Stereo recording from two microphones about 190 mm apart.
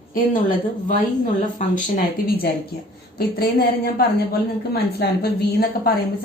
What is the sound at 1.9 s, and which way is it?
A woman's voice, 55° left (ahead or behind).